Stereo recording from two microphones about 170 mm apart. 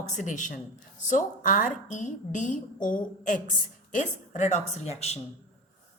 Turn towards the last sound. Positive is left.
turn(degrees=45)  # may be behind; listen again after turning